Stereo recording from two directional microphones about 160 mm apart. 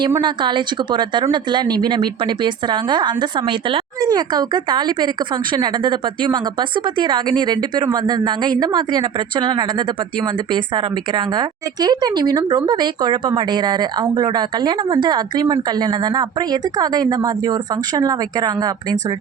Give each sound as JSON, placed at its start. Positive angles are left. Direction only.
{"t": 0.0, "sound": "a woman's voice", "side_deg": -25}